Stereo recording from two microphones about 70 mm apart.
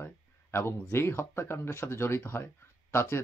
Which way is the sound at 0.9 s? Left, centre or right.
Left.